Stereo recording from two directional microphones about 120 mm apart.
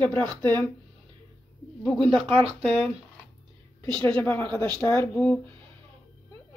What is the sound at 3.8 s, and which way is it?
Speech, 5° left (ahead or behind).